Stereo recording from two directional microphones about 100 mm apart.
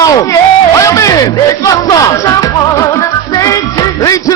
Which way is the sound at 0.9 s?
35° left (ahead or behind).